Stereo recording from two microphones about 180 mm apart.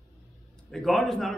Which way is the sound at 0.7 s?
Centre (ahead or behind).